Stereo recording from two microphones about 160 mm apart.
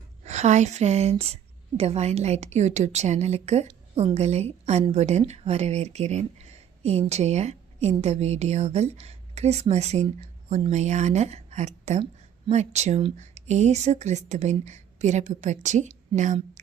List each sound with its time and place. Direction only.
0.3 s a woman's voice: 45° right (ahead or behind)